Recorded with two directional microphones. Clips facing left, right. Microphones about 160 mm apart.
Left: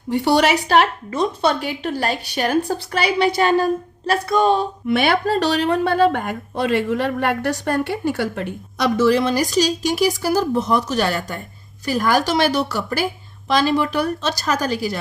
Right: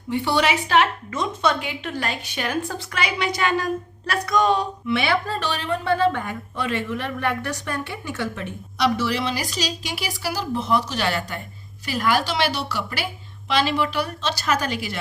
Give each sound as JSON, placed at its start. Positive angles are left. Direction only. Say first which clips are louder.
{"t": 0.1, "sound": "a woman's voice", "louder": "left 5 dB", "side_deg": 40}
{"t": 4.9, "sound": "a woman's voice", "louder": "left 5 dB", "side_deg": 55}
{"t": 6.9, "sound": "speech", "louder": "left 5 dB", "side_deg": 75}
{"t": 8.0, "sound": "speech", "louder": "left 7 dB", "side_deg": 65}
{"t": 8.8, "sound": "a woman's voice", "louder": "left 6 dB", "side_deg": 45}